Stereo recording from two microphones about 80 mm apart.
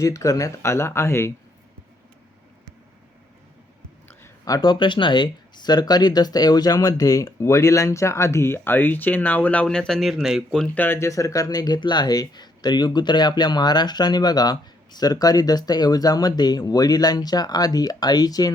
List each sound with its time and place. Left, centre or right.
0.0 s speech: left
4.4 s speech: left; by 10.6 s centre
10.8 s speech: left
11.1 s speech: left
11.8 s speech: left